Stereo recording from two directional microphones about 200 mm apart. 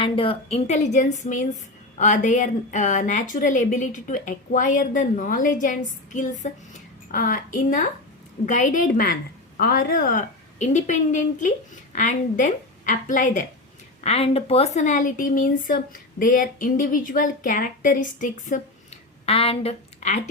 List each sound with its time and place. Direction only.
0.0 s a woman's voice: 25° left (ahead or behind)
19.2 s a woman's voice: 30° left (ahead or behind)